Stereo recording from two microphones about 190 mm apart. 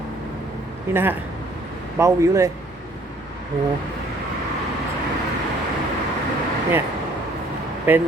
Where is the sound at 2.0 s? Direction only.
15° right (ahead or behind).